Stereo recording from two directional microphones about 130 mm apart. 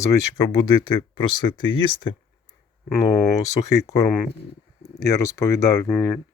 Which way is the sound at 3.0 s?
30° left (ahead or behind).